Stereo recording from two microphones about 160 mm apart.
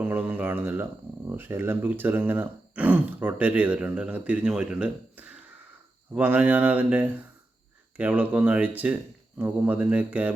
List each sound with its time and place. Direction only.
0.0 s speech: 10° right (ahead or behind)